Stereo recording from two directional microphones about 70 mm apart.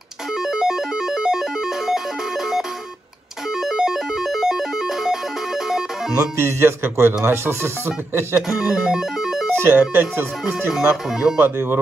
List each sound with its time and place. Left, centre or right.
0.4 s music: centre
6.1 s speech: right
8.5 s music: centre
9.5 s speech: right
11.1 s speech: centre
11.3 s speech: right